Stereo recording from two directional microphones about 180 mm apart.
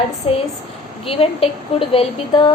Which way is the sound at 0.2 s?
30° left (ahead or behind).